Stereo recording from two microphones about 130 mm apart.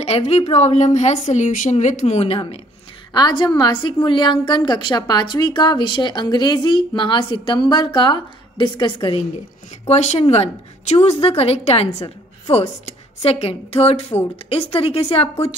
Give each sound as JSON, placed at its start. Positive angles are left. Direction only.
{"t": 0.0, "sound": "a woman's voice", "side_deg": 55}
{"t": 3.1, "sound": "a woman's voice", "side_deg": 30}
{"t": 9.8, "sound": "a woman's voice", "side_deg": 55}